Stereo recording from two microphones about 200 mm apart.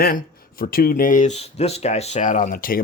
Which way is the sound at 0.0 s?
45° left (ahead or behind).